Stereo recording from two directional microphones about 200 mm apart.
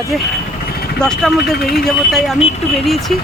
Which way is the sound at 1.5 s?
50° left (ahead or behind).